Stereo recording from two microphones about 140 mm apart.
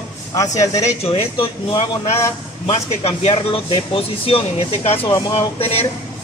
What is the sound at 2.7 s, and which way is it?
Speech, 50° left (ahead or behind).